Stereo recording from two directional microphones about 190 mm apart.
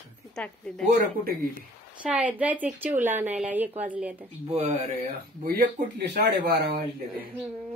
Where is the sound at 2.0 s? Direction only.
5° right (ahead or behind).